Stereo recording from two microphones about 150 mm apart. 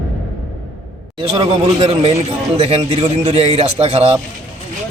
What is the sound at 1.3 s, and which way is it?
A man's voice, 40° right (ahead or behind).